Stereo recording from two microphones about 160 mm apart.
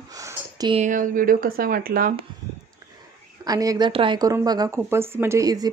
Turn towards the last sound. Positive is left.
turn(degrees=-25)  # may be behind; listen again after turning